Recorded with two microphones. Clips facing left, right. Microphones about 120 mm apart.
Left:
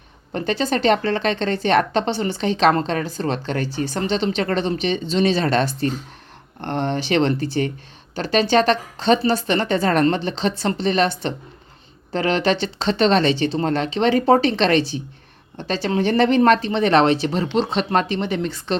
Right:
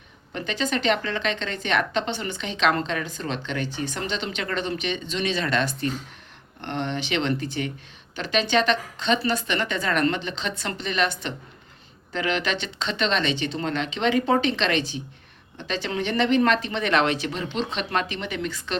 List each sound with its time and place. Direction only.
0.3 s a woman's voice: 35° left (ahead or behind)